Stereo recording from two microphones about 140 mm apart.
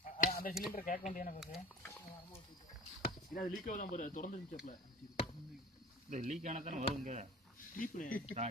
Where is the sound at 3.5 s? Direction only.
75° left (ahead or behind).